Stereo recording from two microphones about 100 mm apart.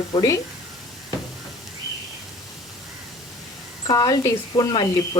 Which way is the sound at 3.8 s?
45° left (ahead or behind).